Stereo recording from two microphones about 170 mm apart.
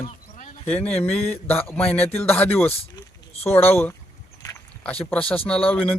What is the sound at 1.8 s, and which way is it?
Speech, 35° left (ahead or behind).